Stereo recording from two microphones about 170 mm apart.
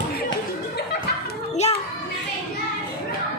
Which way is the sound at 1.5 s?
40° left (ahead or behind).